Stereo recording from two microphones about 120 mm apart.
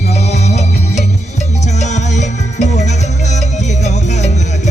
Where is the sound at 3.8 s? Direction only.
75° left (ahead or behind).